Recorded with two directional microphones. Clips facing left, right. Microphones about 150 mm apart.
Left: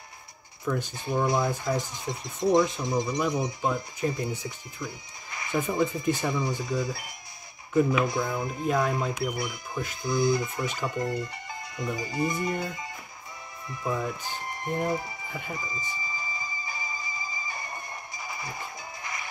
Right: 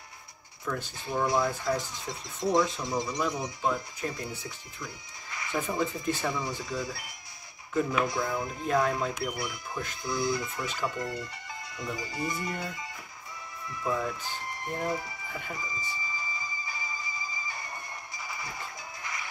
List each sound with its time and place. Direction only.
0.7 s speech: 15° left (ahead or behind)
13.7 s speech: 20° left (ahead or behind)
16.6 s a sound: 15° left (ahead or behind)
18.3 s music: 20° left (ahead or behind)